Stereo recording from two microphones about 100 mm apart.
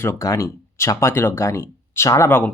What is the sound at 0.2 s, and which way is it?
Speech, 35° left (ahead or behind).